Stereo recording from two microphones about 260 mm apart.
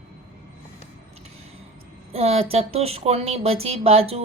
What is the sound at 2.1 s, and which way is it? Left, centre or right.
A woman's voice, right.